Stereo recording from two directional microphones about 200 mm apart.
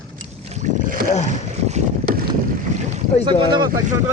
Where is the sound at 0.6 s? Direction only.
45° right (ahead or behind).